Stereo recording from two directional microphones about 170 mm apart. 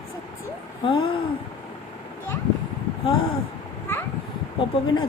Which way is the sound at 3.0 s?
30° left (ahead or behind).